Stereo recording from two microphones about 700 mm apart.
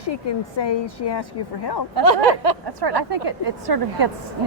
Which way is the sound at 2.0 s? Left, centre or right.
Right.